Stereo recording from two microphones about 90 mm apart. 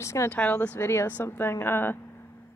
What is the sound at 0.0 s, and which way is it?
Speech, 30° left (ahead or behind).